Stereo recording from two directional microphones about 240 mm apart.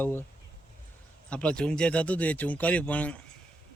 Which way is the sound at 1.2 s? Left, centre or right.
Centre.